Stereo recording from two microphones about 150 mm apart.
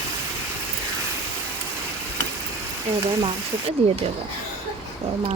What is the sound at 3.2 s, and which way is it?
Speech, 40° right (ahead or behind).